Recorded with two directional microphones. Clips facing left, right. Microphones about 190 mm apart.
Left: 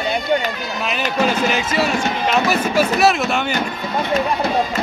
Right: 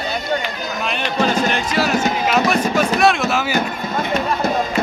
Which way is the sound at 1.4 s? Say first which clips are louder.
Even; centre (ahead or behind).